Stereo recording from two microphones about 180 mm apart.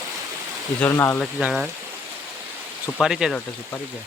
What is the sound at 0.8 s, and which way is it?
Speech, 15° left (ahead or behind).